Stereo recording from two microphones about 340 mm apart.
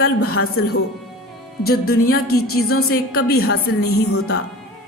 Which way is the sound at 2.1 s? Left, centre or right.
Left.